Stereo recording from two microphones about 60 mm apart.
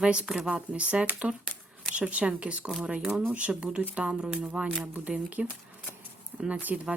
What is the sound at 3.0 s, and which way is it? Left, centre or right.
Speech, centre.